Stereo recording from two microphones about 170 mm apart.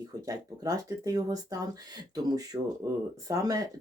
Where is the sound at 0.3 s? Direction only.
20° right (ahead or behind).